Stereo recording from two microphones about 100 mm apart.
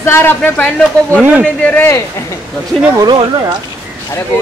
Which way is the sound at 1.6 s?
15° left (ahead or behind).